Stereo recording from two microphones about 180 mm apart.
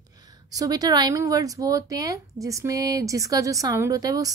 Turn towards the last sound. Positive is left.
turn(degrees=-20)  # may be behind; listen again after turning